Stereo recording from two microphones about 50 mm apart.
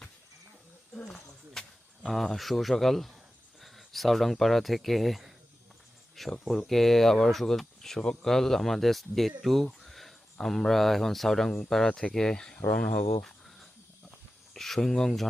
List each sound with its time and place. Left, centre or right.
1.0 s a sound: centre
2.3 s speech: centre
6.4 s speech: centre; by 13.1 s left
14.5 s speech: centre